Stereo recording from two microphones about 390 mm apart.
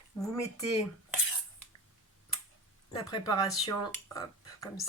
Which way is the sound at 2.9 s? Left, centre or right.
Centre.